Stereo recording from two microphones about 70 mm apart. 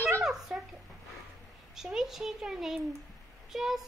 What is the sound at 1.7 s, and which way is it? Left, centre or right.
A child's voice, centre.